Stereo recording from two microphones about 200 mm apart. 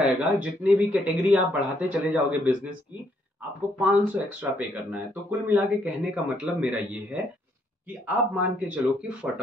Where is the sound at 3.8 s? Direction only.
5° right (ahead or behind).